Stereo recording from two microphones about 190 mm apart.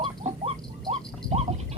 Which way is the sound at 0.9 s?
35° right (ahead or behind).